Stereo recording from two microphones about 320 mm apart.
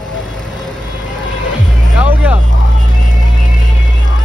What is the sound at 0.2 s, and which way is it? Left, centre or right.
Vehicle, centre.